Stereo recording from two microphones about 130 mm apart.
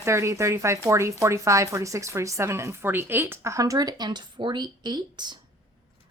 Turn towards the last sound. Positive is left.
turn(degrees=-35)  # may be behind; listen again after turning